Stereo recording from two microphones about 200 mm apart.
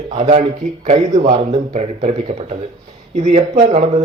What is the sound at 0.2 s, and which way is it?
A man's voice, 35° right (ahead or behind).